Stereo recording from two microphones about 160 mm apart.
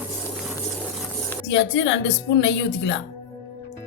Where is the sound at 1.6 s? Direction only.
90° left.